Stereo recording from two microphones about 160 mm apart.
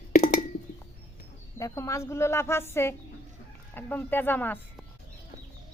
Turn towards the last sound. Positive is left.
turn(degrees=10)  # may be behind; listen again after turning